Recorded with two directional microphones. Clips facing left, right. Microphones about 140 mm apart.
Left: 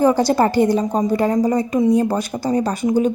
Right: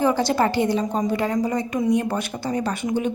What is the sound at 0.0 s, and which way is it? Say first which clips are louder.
A woman's voice: left 5 dB; 40° left (ahead or behind).